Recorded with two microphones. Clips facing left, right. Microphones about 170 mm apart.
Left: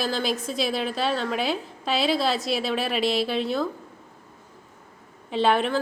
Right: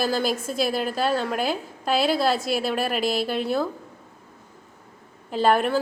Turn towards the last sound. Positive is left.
turn(degrees=-5)  # may be behind; listen again after turning